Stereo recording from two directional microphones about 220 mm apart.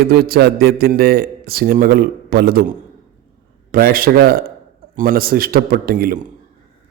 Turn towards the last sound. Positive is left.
turn(degrees=-40)  # may be behind; listen again after turning